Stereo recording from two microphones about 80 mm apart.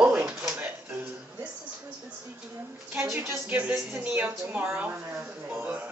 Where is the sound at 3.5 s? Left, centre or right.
Right.